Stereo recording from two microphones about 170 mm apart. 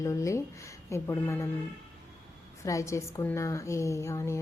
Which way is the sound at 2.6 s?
20° left (ahead or behind).